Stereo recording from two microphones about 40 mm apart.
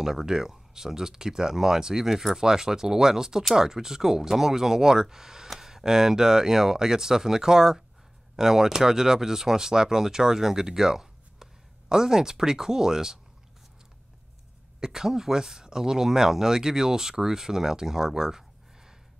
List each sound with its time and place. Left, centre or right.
0.0 s speech: centre
14.8 s speech: centre